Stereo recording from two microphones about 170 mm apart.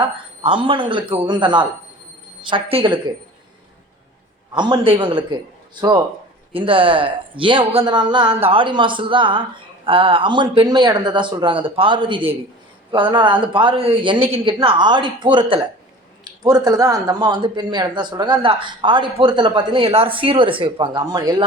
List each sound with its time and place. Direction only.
0.0 s speech: 30° right (ahead or behind)
4.5 s speech: 25° right (ahead or behind)
6.5 s speech: 30° right (ahead or behind)